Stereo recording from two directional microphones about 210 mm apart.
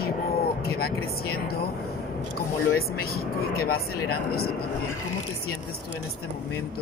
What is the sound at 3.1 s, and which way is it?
Speech, 45° left (ahead or behind).